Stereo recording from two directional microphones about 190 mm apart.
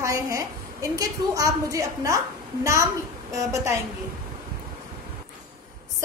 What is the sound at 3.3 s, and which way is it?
Speech, 15° right (ahead or behind).